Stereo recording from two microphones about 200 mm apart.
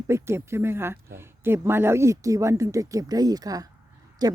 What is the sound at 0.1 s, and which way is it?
Speech, 15° right (ahead or behind).